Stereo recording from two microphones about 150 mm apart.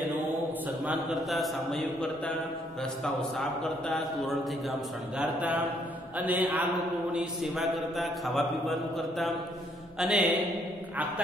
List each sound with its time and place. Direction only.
0.8 s a man's voice: centre (ahead or behind)